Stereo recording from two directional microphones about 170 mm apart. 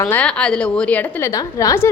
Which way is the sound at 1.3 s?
20° left (ahead or behind).